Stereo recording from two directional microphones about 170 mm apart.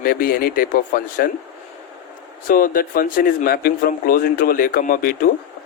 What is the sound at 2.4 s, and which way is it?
Speech, 55° left (ahead or behind).